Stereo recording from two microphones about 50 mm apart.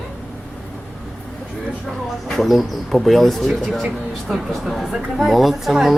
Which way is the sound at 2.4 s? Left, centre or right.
Centre.